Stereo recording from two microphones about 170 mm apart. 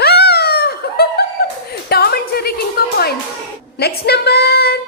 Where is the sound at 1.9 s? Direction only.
65° left (ahead or behind).